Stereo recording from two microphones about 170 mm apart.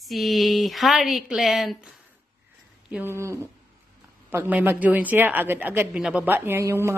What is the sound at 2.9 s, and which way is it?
A woman's voice, 15° right (ahead or behind).